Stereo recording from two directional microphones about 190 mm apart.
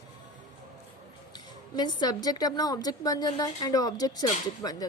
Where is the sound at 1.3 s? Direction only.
20° left (ahead or behind).